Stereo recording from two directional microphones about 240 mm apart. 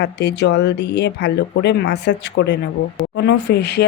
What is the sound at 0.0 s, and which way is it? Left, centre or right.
Speech, left.